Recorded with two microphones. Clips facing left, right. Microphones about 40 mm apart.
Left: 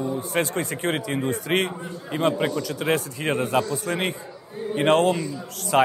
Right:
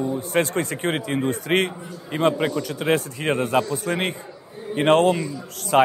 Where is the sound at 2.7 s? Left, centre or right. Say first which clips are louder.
Right 2 dB; right.